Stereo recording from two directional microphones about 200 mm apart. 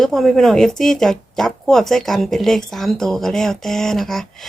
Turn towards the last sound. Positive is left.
turn(degrees=0)  # may be behind; listen again after turning